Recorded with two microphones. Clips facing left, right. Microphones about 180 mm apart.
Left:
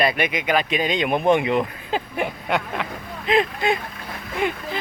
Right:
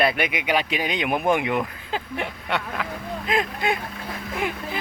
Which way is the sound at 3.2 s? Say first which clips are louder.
Left 5 dB; centre (ahead or behind).